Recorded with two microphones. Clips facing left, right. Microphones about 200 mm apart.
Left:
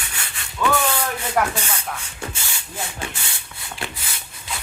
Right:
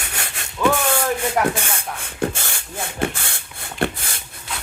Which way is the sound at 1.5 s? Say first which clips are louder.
Right 1 dB; 50° right (ahead or behind).